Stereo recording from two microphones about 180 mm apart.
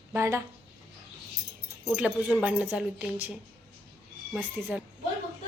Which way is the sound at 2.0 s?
10° right (ahead or behind).